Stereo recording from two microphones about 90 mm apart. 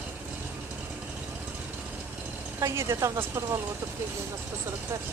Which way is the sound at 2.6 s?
35° right (ahead or behind).